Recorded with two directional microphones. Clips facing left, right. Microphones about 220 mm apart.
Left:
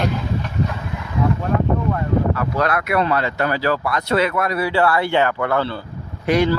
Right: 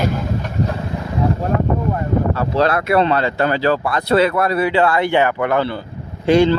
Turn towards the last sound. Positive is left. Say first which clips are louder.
# right 5 dB
turn(degrees=-30)  # may be behind; listen again after turning